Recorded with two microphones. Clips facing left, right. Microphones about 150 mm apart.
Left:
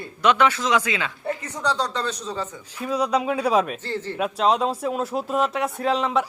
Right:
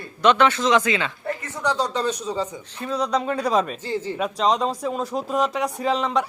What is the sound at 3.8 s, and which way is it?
Speech, 15° right (ahead or behind).